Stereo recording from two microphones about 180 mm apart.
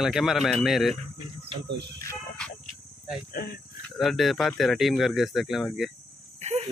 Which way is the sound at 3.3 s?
60° left (ahead or behind).